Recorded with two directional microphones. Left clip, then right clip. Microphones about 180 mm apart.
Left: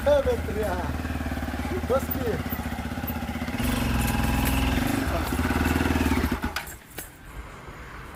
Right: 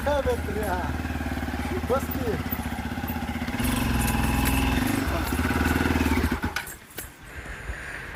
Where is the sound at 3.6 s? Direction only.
20° left (ahead or behind).